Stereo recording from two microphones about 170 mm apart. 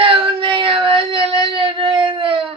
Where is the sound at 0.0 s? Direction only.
30° right (ahead or behind).